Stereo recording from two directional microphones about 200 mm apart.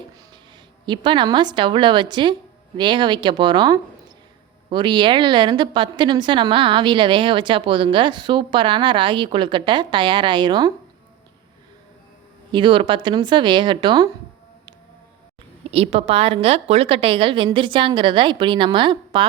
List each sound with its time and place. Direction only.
0.9 s a woman's voice: 25° right (ahead or behind)
12.5 s a woman's voice: 25° right (ahead or behind)
15.7 s a woman's voice: 30° right (ahead or behind)